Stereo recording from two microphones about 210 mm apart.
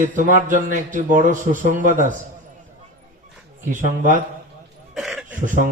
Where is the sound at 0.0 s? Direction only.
40° right (ahead or behind).